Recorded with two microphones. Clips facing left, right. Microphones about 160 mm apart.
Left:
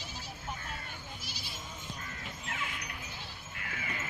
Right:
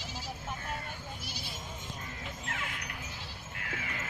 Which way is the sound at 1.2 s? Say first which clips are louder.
Right 3 dB; 55° right (ahead or behind).